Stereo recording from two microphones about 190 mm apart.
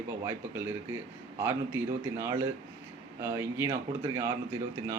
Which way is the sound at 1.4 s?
15° right (ahead or behind).